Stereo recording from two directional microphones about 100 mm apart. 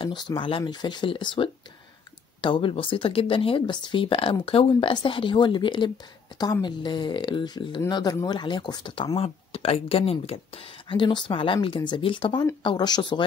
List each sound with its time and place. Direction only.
0.4 s speech: 60° left (ahead or behind)
8.9 s speech: 65° left (ahead or behind); by 13.2 s 45° left (ahead or behind)